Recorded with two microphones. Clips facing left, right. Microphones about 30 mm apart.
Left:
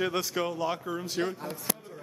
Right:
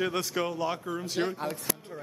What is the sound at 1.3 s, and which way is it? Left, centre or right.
Speech, right.